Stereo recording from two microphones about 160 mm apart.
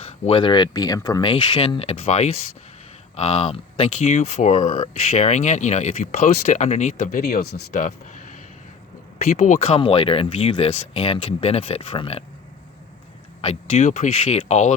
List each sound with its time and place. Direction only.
0.0 s speech: 35° left (ahead or behind)
1.4 s speech: 40° left (ahead or behind)
7.1 s speech: 70° left (ahead or behind); by 8.4 s 50° left (ahead or behind)
9.4 s speech: 40° left (ahead or behind)
13.4 s speech: 40° left (ahead or behind)